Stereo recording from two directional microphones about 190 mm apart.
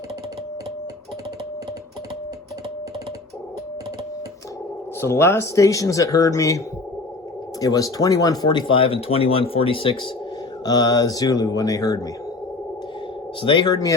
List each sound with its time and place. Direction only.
4.9 s speech: 15° left (ahead or behind)
7.6 s speech: 20° left (ahead or behind)
13.4 s speech: 25° left (ahead or behind)